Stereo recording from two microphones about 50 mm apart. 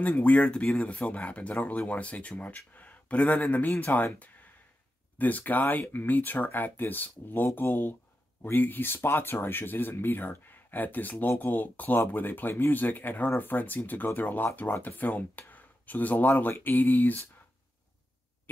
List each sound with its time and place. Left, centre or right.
0.0 s speech: left